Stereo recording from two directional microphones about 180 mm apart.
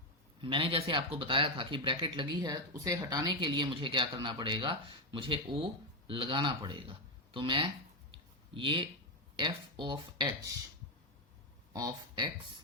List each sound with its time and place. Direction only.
0.4 s speech: 30° right (ahead or behind)
11.7 s speech: 20° right (ahead or behind)